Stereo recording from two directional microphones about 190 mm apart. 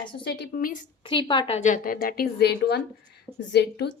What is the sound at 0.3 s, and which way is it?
Speech, 55° left (ahead or behind).